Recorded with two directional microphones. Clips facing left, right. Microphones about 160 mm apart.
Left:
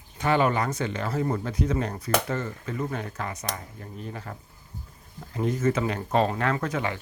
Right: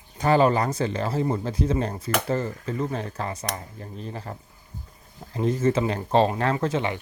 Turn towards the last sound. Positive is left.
turn(degrees=-25)  # may be behind; listen again after turning